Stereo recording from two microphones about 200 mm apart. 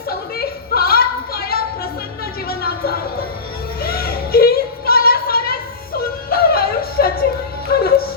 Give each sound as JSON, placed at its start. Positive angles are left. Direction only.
{"t": 0.3, "sound": "music", "side_deg": 50}
{"t": 3.8, "sound": "a sound", "side_deg": 50}
{"t": 7.7, "sound": "music", "side_deg": 50}